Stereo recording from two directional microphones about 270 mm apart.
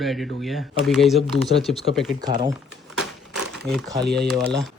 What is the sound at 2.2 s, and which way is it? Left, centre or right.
Speech, centre.